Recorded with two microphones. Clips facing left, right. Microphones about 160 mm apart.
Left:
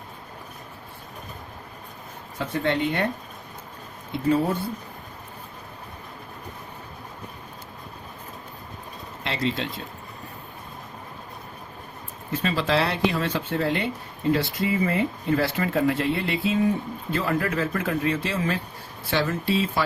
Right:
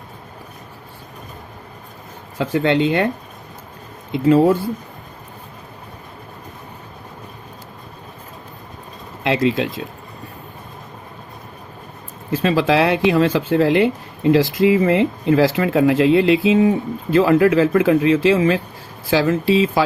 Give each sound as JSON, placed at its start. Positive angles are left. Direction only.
{"t": 2.4, "sound": "speech", "side_deg": -90}
{"t": 4.1, "sound": "speech", "side_deg": -90}
{"t": 9.2, "sound": "speech", "side_deg": -90}
{"t": 12.3, "sound": "speech", "side_deg": -90}